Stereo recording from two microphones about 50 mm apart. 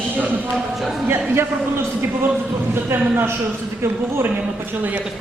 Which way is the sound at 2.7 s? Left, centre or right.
Right.